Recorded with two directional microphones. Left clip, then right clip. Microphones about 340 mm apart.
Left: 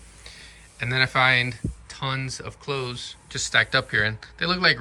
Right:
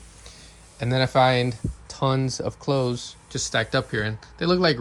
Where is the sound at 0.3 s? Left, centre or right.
Centre.